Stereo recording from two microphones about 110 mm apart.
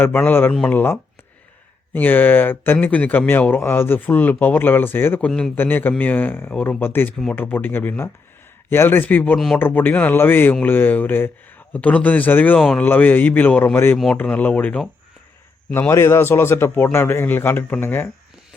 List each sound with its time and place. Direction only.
0.0 s speech: 15° left (ahead or behind)
12.5 s speech: 5° left (ahead or behind)
12.8 s speech: 15° left (ahead or behind)
15.7 s a man's voice: 25° left (ahead or behind)